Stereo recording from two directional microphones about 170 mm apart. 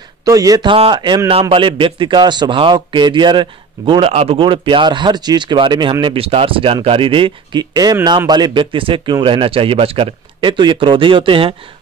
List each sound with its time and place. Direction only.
0.2 s a man's voice: 20° right (ahead or behind)